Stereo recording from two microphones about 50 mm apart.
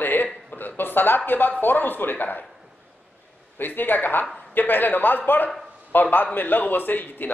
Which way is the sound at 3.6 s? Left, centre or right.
Left.